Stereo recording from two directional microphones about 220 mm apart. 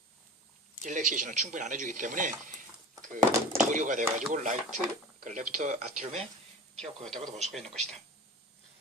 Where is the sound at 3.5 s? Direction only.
35° right (ahead or behind).